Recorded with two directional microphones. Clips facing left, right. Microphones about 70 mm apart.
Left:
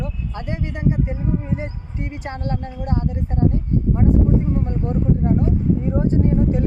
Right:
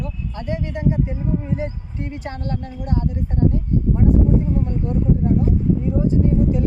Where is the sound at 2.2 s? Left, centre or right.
Left.